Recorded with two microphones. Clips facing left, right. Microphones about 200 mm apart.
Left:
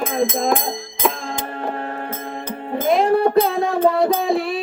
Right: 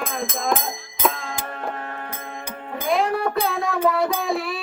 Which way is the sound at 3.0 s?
30° left (ahead or behind).